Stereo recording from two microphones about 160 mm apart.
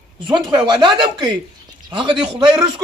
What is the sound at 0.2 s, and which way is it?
A man's voice, 30° right (ahead or behind).